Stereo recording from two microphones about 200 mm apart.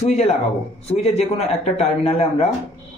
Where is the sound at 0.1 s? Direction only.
35° left (ahead or behind).